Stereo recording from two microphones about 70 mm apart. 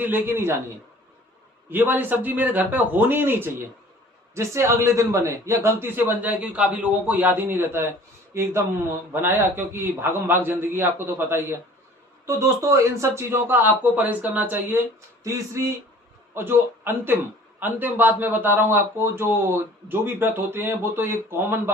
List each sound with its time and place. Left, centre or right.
0.0 s speech: right
1.7 s a man's voice: right
4.4 s a woman's voice: right
5.8 s a man's voice: right
12.2 s a woman's voice: right
13.5 s a man's voice: right
15.2 s speech: right
16.3 s speech: right